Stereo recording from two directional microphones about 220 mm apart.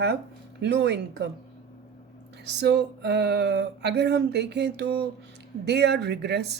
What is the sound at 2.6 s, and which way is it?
Speech, 50° right (ahead or behind).